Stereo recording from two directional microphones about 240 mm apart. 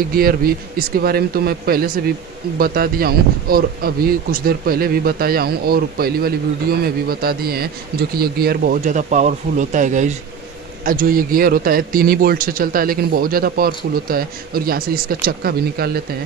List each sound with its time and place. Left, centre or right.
0.1 s a man's voice: right